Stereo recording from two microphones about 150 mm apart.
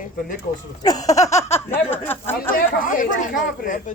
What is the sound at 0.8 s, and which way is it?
Speech, 25° left (ahead or behind).